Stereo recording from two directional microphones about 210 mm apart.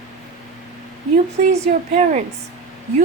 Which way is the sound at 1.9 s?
35° right (ahead or behind).